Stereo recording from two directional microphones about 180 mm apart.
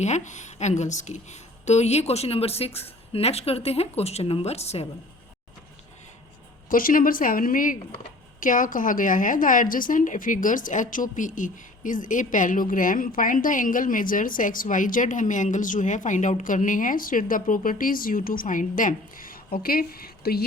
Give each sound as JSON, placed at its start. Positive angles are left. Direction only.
{"t": 0.0, "sound": "a woman's voice", "side_deg": 40}
{"t": 6.7, "sound": "a woman's voice", "side_deg": 50}